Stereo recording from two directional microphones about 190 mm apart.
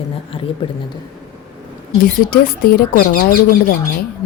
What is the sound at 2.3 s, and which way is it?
Speech, 50° left (ahead or behind).